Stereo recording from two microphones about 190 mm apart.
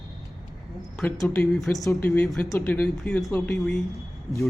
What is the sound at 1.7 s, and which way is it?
Speech, 15° left (ahead or behind).